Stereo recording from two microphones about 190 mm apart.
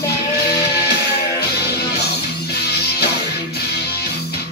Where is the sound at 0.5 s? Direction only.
60° left (ahead or behind).